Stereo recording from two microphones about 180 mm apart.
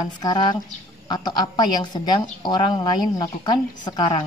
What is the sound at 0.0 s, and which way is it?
A woman's voice, 25° left (ahead or behind).